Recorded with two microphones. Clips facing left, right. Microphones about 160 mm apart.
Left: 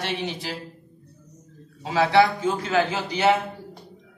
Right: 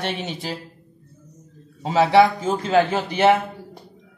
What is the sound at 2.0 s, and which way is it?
Speech, 25° right (ahead or behind).